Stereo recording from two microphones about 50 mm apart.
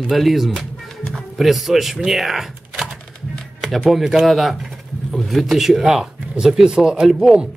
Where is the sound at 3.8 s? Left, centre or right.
Centre.